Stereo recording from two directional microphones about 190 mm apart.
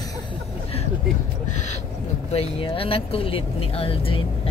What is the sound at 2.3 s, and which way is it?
Speech, 30° left (ahead or behind).